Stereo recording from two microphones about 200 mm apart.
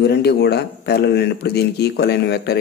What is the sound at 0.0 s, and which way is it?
Speech, 55° left (ahead or behind).